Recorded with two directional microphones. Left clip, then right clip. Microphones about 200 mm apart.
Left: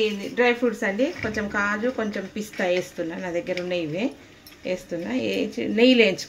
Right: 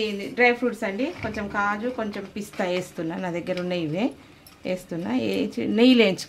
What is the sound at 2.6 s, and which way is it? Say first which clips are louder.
Speech: left 4 dB; 35° right (ahead or behind).